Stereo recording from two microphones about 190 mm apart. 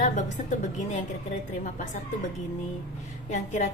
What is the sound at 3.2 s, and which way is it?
Speech, 40° left (ahead or behind).